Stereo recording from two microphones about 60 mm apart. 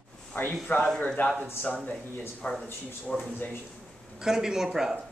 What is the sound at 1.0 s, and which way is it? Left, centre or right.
Speech, left.